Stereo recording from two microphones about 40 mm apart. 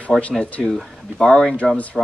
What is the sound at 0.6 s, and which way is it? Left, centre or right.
Speech, centre.